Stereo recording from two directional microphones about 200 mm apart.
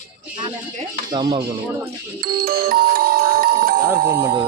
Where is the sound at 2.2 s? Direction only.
50° right (ahead or behind).